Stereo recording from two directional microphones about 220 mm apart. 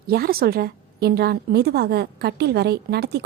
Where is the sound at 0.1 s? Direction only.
45° right (ahead or behind).